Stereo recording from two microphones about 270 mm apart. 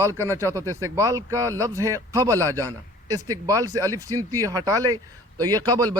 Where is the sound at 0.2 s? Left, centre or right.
Centre.